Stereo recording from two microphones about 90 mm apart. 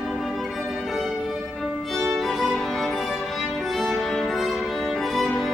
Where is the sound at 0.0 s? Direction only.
Centre (ahead or behind).